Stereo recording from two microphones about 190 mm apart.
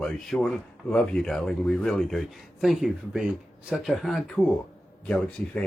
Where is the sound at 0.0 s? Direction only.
5° left (ahead or behind).